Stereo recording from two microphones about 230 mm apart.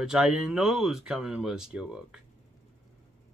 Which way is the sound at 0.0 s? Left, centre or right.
Centre.